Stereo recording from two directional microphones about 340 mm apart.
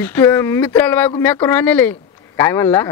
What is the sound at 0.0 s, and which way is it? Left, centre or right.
Speech, centre.